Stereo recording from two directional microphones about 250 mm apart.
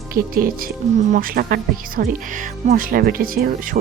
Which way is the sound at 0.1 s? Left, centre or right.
Right.